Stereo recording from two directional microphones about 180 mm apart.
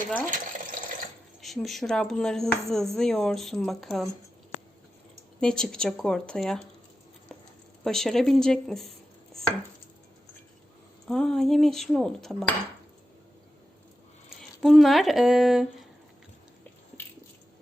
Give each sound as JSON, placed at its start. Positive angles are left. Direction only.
{"t": 0.3, "sound": "water", "side_deg": -45}
{"t": 1.4, "sound": "speech", "side_deg": 0}
{"t": 5.4, "sound": "speech", "side_deg": 5}
{"t": 7.9, "sound": "speech", "side_deg": 0}
{"t": 11.1, "sound": "speech", "side_deg": 5}
{"t": 14.6, "sound": "speech", "side_deg": 0}